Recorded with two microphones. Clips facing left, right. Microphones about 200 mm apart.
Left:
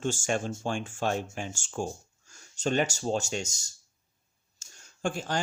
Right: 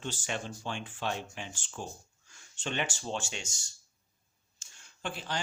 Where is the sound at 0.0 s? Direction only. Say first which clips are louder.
Left 8 dB; 45° left (ahead or behind).